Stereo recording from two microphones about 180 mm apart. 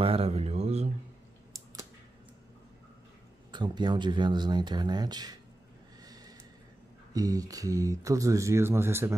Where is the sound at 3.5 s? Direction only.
25° right (ahead or behind).